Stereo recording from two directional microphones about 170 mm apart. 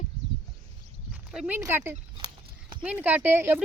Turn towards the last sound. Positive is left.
turn(degrees=-10)  # may be behind; listen again after turning